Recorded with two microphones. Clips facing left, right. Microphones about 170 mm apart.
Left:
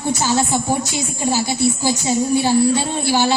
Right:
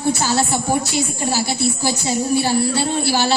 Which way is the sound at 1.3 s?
15° left (ahead or behind).